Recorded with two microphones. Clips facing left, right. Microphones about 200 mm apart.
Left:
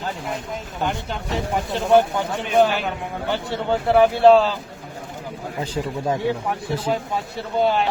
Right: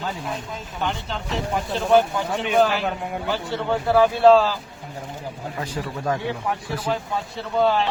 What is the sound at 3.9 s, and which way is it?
Speech, 20° left (ahead or behind).